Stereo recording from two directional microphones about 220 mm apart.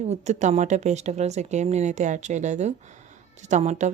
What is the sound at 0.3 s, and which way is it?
Speech, 30° right (ahead or behind).